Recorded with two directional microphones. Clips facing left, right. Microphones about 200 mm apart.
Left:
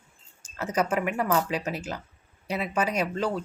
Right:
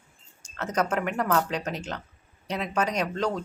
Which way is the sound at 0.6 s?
10° left (ahead or behind).